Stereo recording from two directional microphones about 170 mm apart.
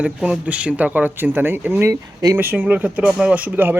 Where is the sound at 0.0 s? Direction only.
5° right (ahead or behind).